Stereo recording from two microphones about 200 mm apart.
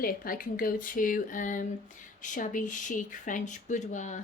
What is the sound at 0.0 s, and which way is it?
Speech, 45° left (ahead or behind).